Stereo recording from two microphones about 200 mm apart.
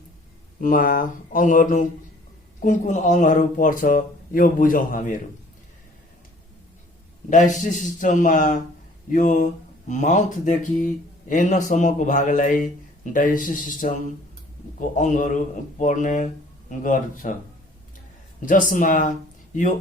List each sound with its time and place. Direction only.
0.6 s speech: 45° left (ahead or behind)
7.3 s speech: 40° left (ahead or behind)
18.7 s speech: 40° left (ahead or behind)